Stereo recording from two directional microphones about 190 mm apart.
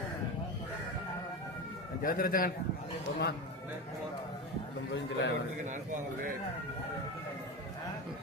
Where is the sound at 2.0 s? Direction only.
50° left (ahead or behind).